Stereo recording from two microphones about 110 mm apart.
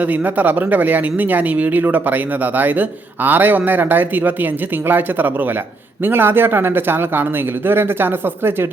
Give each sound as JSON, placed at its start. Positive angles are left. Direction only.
{"t": 0.1, "sound": "speech", "side_deg": -15}